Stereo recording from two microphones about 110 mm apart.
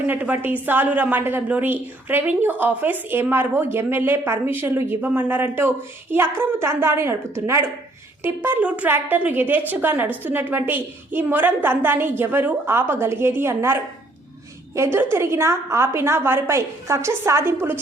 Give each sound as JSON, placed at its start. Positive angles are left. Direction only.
{"t": 0.1, "sound": "a woman's voice", "side_deg": -15}